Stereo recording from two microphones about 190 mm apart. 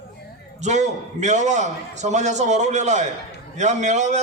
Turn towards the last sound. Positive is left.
turn(degrees=-40)  # may be behind; listen again after turning